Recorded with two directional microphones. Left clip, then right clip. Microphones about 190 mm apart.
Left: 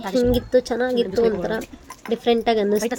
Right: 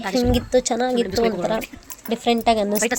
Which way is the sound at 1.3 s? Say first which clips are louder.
Right 1 dB; 25° right (ahead or behind).